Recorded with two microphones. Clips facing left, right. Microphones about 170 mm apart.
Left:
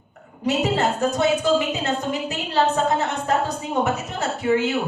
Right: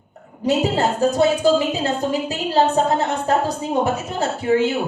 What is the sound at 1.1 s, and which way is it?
Speech, 35° right (ahead or behind).